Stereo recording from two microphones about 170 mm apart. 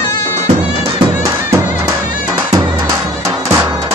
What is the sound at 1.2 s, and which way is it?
Music, 20° right (ahead or behind).